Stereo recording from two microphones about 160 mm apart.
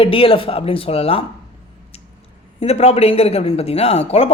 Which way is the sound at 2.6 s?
40° left (ahead or behind).